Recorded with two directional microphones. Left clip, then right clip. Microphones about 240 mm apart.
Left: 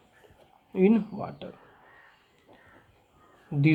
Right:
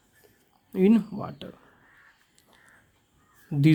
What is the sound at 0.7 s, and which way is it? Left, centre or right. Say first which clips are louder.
Speech: right 1 dB; right.